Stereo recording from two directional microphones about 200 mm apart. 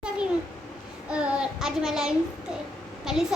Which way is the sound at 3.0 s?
Centre (ahead or behind).